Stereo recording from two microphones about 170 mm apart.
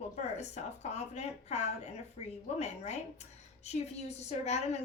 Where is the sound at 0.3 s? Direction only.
40° left (ahead or behind).